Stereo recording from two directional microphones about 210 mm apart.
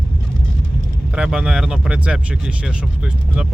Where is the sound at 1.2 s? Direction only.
5° right (ahead or behind).